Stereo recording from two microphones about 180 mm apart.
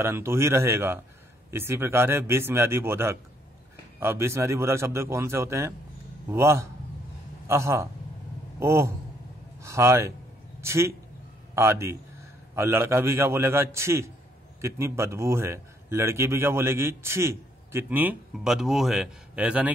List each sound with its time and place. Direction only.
0.0 s a man's voice: 15° right (ahead or behind)